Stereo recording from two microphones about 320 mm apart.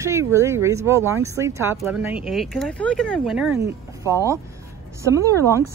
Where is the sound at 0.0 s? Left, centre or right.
Centre.